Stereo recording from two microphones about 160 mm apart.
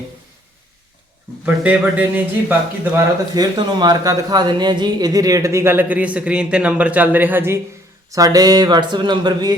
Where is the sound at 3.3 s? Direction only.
25° right (ahead or behind).